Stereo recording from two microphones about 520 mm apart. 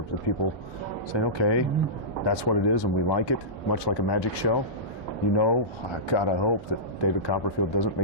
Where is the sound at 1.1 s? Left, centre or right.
Left.